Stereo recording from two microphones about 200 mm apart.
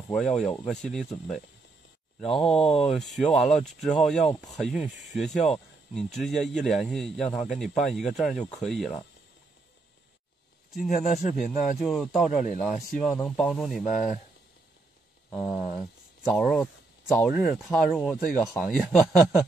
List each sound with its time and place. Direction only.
0.1 s speech: centre (ahead or behind)
11.4 s speech: 40° left (ahead or behind)
11.8 s speech: centre (ahead or behind)
15.2 s a sound: 5° left (ahead or behind)
15.5 s speech: centre (ahead or behind)